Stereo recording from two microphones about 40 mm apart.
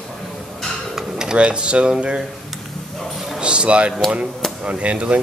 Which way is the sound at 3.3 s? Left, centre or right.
Right.